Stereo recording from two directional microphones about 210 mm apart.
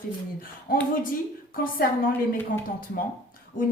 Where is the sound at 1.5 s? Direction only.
45° left (ahead or behind).